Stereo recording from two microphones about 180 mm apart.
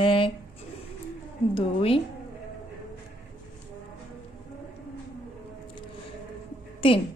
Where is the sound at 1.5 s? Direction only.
30° left (ahead or behind).